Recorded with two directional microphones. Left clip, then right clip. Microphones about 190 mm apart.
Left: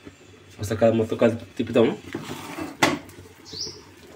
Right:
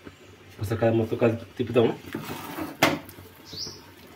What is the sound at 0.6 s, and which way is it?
Speech, 60° left (ahead or behind).